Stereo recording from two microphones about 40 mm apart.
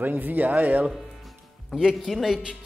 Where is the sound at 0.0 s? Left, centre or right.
Right.